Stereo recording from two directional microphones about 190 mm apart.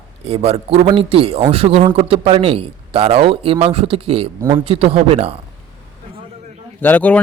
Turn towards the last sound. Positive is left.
turn(degrees=10)  # may be behind; listen again after turning